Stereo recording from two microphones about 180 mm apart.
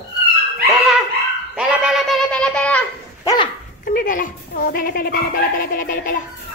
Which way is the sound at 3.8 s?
50° left (ahead or behind).